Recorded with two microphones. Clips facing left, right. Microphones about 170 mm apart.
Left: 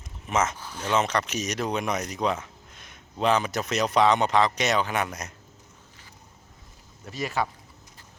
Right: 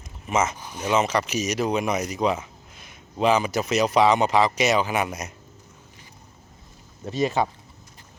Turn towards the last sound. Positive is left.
turn(degrees=-20)  # may be behind; listen again after turning